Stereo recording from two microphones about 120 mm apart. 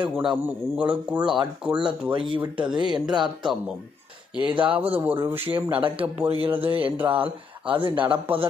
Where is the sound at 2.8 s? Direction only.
40° right (ahead or behind).